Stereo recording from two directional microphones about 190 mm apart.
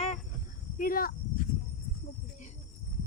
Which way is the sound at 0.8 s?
50° left (ahead or behind).